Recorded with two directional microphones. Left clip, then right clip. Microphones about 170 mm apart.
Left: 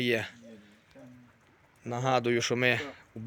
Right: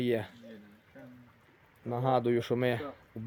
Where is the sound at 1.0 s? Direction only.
15° left (ahead or behind).